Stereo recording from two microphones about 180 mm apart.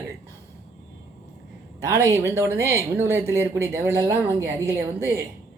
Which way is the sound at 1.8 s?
15° right (ahead or behind).